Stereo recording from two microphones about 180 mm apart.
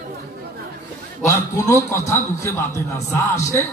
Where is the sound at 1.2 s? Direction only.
15° left (ahead or behind).